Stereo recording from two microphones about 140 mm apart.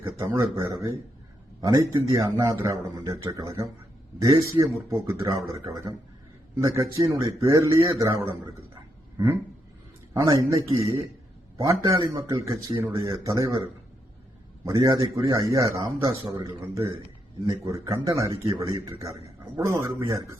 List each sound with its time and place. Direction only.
0.2 s a man's voice: 15° right (ahead or behind)
0.7 s a man's voice: 30° right (ahead or behind)
4.6 s speech: centre (ahead or behind)
5.2 s a man's voice: 25° right (ahead or behind)
10.2 s a man's voice: 25° right (ahead or behind)
14.6 s a man's voice: 25° right (ahead or behind)